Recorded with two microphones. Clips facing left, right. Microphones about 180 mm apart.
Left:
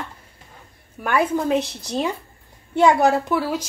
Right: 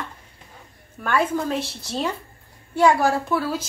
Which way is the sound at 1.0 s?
15° left (ahead or behind).